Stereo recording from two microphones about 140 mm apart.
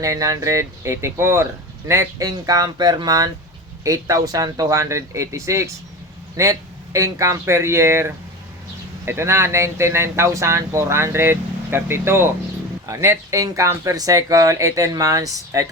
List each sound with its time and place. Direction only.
0.0 s speech: 25° right (ahead or behind)